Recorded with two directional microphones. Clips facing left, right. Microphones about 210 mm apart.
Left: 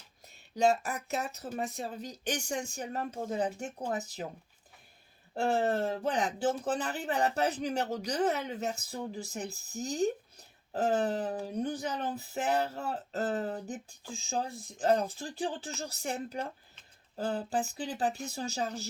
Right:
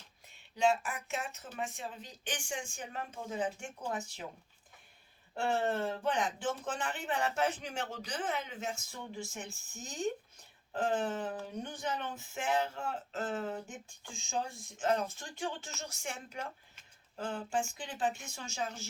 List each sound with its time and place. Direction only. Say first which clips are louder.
0.5 s speech: left 3 dB; 40° left (ahead or behind)
5.3 s speech: left 4 dB; 35° left (ahead or behind)